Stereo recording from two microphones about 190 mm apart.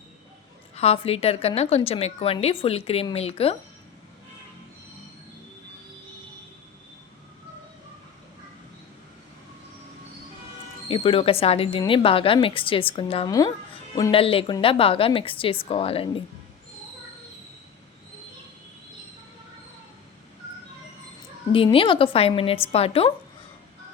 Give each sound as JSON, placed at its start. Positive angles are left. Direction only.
{"t": 0.8, "sound": "a woman's voice", "side_deg": 30}
{"t": 10.8, "sound": "speech", "side_deg": 30}
{"t": 21.5, "sound": "speech", "side_deg": 30}